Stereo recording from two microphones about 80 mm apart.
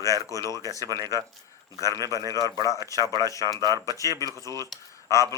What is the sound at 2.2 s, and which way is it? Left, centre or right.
Speech, right.